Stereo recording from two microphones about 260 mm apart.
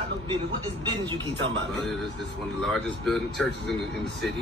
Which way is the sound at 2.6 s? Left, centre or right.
Centre.